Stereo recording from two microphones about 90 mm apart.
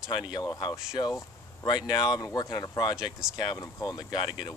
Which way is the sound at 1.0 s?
60° left (ahead or behind).